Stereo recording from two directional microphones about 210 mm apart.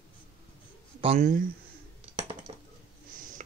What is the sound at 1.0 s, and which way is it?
Speech, 30° right (ahead or behind).